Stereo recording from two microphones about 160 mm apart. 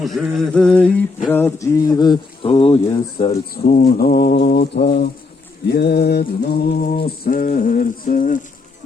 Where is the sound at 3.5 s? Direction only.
65° left (ahead or behind).